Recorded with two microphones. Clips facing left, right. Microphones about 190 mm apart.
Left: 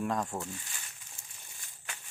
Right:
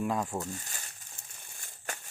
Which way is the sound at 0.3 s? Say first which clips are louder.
Right 3 dB; 40° right (ahead or behind).